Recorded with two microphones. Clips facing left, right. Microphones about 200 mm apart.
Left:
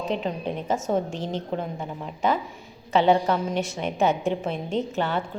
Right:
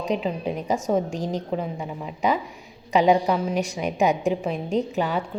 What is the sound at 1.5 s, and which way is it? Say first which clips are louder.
A woman's voice: right 2 dB; 5° right (ahead or behind).